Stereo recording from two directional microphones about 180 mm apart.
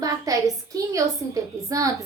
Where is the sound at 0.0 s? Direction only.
20° right (ahead or behind).